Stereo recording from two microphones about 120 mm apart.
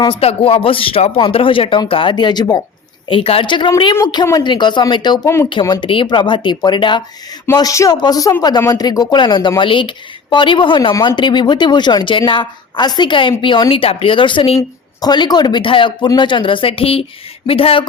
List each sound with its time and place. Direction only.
0.2 s a woman's voice: 55° left (ahead or behind); by 2.6 s 35° left (ahead or behind)
3.1 s a woman's voice: 50° left (ahead or behind)
5.2 s speech: 25° left (ahead or behind)
5.5 s speech: 40° left (ahead or behind)
7.5 s a woman's voice: 30° left (ahead or behind); by 14.6 s 50° left (ahead or behind)
15.0 s a woman's voice: 35° left (ahead or behind)